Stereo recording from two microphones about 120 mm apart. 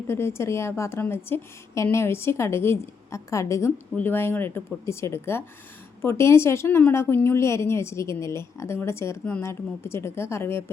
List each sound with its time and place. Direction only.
0.1 s a woman's voice: 20° left (ahead or behind)